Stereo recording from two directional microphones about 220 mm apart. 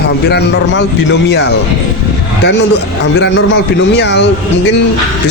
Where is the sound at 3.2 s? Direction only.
55° left (ahead or behind).